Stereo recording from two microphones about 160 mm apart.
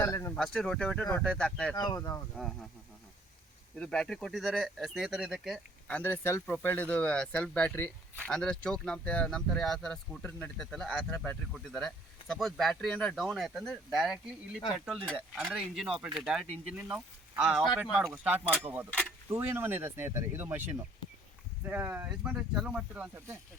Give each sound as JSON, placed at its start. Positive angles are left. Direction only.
{"t": 0.0, "sound": "speech", "side_deg": 15}
{"t": 0.3, "sound": "speech", "side_deg": 5}
{"t": 1.7, "sound": "speech", "side_deg": 25}
{"t": 2.3, "sound": "speech", "side_deg": 5}
{"t": 3.8, "sound": "speech", "side_deg": 5}
{"t": 5.9, "sound": "speech", "side_deg": 15}
{"t": 21.6, "sound": "speech", "side_deg": -15}